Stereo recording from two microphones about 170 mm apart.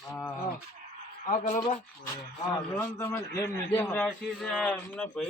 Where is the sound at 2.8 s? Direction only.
10° left (ahead or behind).